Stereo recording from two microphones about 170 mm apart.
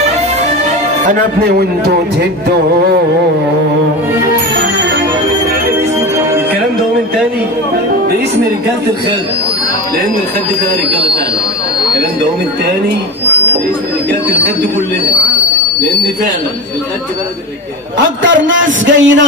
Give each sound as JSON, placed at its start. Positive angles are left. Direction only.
{"t": 1.0, "sound": "speech", "side_deg": -60}
{"t": 4.6, "sound": "music", "side_deg": -90}
{"t": 5.9, "sound": "music", "side_deg": -15}
{"t": 17.9, "sound": "a man's voice", "side_deg": -90}